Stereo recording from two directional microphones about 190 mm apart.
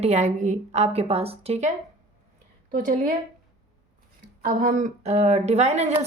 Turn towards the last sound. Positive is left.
turn(degrees=-35)  # may be behind; listen again after turning